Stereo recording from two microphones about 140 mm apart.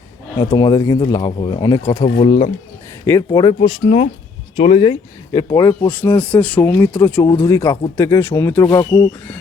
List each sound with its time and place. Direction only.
0.5 s speech: 25° left (ahead or behind)
2.2 s speech: 35° left (ahead or behind)
3.1 s speech: 25° left (ahead or behind); by 4.9 s 40° left (ahead or behind)
5.3 s speech: 25° left (ahead or behind)
5.9 s speech: 15° left (ahead or behind)